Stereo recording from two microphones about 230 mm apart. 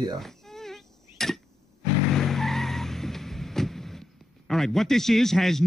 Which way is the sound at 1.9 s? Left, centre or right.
Centre.